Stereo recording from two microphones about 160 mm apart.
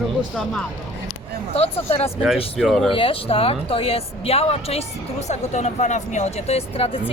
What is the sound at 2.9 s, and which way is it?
Speech, 35° left (ahead or behind).